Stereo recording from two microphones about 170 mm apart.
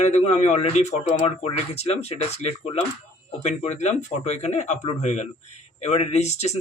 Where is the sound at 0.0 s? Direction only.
40° left (ahead or behind).